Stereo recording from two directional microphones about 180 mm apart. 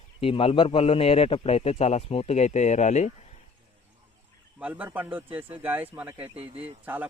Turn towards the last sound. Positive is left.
turn(degrees=-10)  # may be behind; listen again after turning